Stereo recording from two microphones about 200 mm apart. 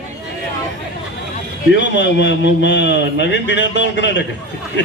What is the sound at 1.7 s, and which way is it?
A man's voice, 65° left (ahead or behind).